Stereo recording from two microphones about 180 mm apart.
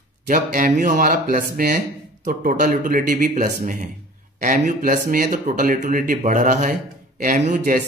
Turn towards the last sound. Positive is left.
turn(degrees=-45)  # may be behind; listen again after turning